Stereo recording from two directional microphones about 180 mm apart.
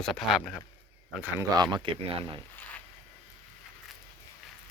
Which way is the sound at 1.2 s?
15° right (ahead or behind).